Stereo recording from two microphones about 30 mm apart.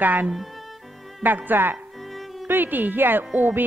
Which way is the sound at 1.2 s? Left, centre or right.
Right.